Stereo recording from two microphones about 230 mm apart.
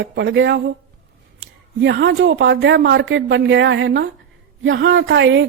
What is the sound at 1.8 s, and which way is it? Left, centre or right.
Speech, right.